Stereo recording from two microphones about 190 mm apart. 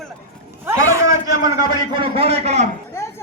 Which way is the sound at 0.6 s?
15° right (ahead or behind).